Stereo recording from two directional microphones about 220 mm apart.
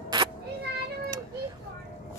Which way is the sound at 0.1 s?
20° right (ahead or behind).